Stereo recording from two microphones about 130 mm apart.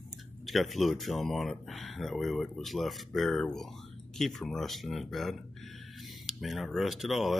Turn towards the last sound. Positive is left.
turn(degrees=0)  # may be behind; listen again after turning